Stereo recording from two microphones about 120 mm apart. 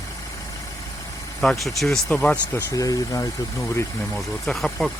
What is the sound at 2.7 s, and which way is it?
Speech, 30° left (ahead or behind).